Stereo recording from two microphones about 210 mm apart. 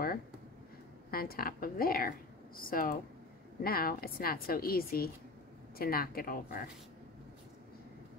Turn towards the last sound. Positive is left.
turn(degrees=45)  # may be behind; listen again after turning